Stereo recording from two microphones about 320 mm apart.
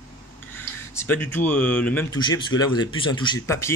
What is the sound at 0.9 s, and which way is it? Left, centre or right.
Speech, centre.